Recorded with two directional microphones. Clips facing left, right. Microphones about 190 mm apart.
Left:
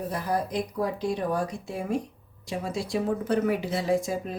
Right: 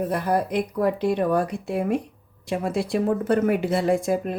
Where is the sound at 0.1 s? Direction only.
60° right (ahead or behind).